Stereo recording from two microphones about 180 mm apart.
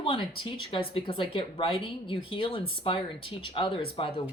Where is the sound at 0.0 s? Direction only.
30° left (ahead or behind).